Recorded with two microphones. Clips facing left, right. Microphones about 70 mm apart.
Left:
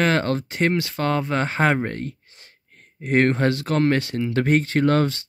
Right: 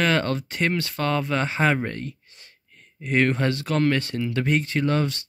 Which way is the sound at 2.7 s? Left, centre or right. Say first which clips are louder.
Left 3 dB; left.